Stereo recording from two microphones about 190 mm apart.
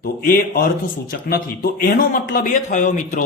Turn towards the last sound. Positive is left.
turn(degrees=40)  # may be behind; listen again after turning